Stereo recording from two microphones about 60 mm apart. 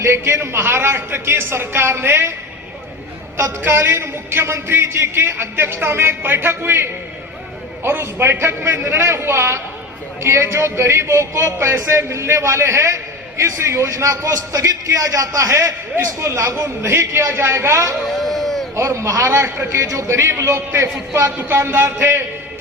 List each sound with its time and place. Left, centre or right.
0.0 s a man's voice: right
3.7 s a man's voice: right
18.0 s a sound: centre
18.8 s speech: right
19.8 s speech: right
21.3 s a man's voice: right